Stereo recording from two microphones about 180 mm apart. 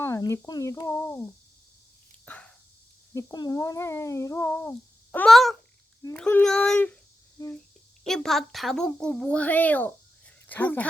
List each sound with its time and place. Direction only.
0.0 s speech: 15° left (ahead or behind)
2.2 s dog: 10° left (ahead or behind)
3.2 s a child's voice: 20° left (ahead or behind)
8.0 s a woman's voice: 5° left (ahead or behind)